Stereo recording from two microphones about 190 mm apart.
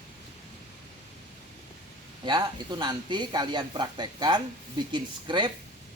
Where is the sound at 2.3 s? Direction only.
25° right (ahead or behind).